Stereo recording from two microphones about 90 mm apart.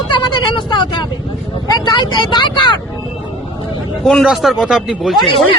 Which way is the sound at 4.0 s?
5° left (ahead or behind).